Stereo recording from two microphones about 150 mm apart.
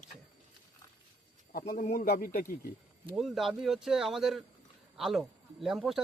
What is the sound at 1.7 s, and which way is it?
Speech, 60° left (ahead or behind).